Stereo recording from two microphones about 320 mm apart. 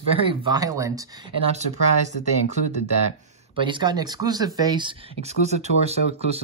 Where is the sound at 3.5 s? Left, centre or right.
Centre.